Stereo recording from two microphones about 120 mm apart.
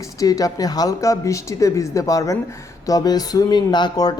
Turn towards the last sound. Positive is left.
turn(degrees=35)  # may be behind; listen again after turning